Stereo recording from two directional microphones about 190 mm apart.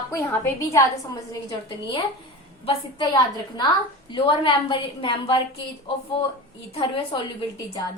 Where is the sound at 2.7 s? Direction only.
20° left (ahead or behind).